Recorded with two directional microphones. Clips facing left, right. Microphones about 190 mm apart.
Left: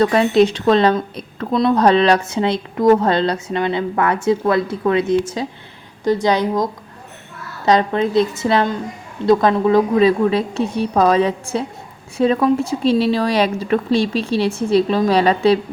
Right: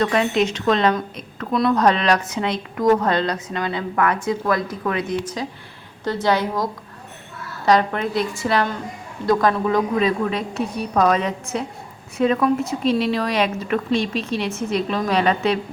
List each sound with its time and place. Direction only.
0.0 s a woman's voice: 35° left (ahead or behind)